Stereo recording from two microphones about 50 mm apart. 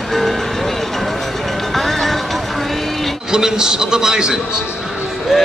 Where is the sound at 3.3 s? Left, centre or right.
Centre.